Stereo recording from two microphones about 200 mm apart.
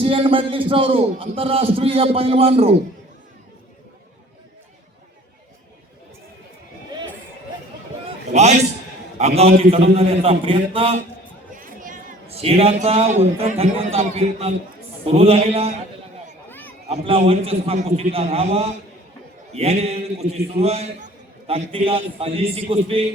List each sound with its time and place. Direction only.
0.0 s a man's voice: 25° right (ahead or behind)
8.3 s a man's voice: 35° right (ahead or behind)
11.5 s a man's voice: 40° right (ahead or behind)
16.5 s a sound: 10° left (ahead or behind)
16.9 s a man's voice: 30° right (ahead or behind)